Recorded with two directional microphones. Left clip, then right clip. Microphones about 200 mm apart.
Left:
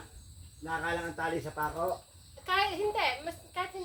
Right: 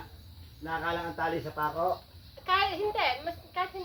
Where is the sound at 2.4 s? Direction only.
65° left (ahead or behind).